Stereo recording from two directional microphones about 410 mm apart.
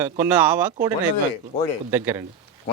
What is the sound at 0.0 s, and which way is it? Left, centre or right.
Speech, centre.